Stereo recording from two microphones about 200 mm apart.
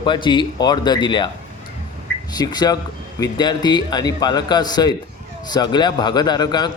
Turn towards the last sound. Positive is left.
turn(degrees=20)  # may be behind; listen again after turning